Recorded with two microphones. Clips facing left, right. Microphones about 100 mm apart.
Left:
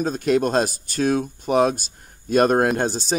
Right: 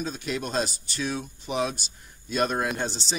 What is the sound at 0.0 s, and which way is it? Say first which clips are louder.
Speech: left 11 dB; 50° left (ahead or behind).